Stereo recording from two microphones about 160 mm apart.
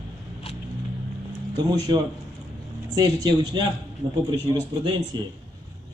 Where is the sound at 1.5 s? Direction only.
25° right (ahead or behind).